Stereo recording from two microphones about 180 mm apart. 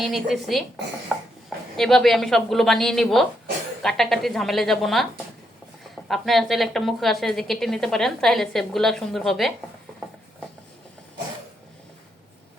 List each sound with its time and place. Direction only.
0.0 s a woman's voice: centre (ahead or behind)
6.1 s a woman's voice: centre (ahead or behind)